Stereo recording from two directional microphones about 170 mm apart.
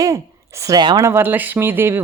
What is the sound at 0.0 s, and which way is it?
A woman's voice, 20° right (ahead or behind).